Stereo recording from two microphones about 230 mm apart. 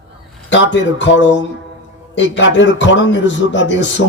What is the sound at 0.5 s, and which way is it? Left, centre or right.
Speech, left.